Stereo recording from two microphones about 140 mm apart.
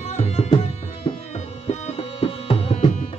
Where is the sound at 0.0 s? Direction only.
50° left (ahead or behind).